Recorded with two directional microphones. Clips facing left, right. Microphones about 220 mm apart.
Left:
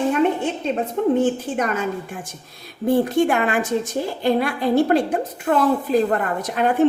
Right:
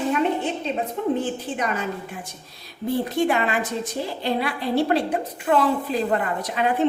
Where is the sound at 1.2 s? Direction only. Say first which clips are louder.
Left 6 dB; 45° left (ahead or behind).